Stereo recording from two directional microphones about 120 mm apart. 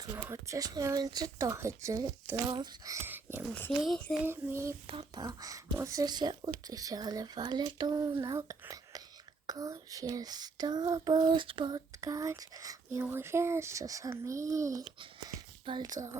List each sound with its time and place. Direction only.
0.0 s speech: 25° right (ahead or behind)
3.8 s a child's voice: 5° left (ahead or behind)
4.2 s speech: 20° right (ahead or behind)
4.9 s speech: 50° right (ahead or behind)
5.2 s speech: 30° right (ahead or behind)
11.9 s speech: 30° right (ahead or behind)
15.6 s speech: 40° right (ahead or behind)
15.9 s speech: 30° right (ahead or behind)